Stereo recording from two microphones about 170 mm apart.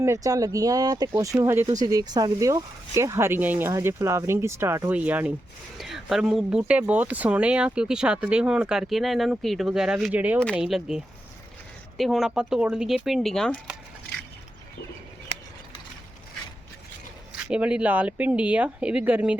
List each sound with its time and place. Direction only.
0.0 s speech: 20° right (ahead or behind); by 13.7 s 5° left (ahead or behind)
17.3 s speech: 5° right (ahead or behind)